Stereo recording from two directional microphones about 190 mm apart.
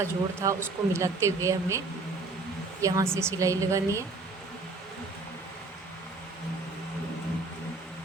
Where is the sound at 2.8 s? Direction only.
15° right (ahead or behind).